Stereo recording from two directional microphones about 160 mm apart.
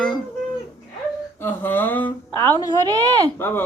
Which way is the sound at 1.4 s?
10° left (ahead or behind).